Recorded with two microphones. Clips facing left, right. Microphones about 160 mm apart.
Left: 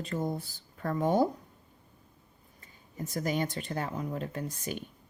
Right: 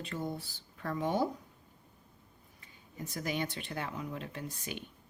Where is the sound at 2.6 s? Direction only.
45° left (ahead or behind).